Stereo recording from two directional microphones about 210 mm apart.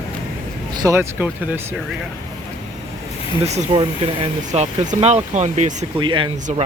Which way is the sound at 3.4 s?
30° right (ahead or behind).